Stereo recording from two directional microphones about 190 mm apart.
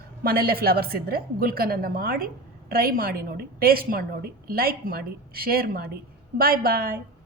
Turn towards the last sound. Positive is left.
turn(degrees=-50)  # may be behind; listen again after turning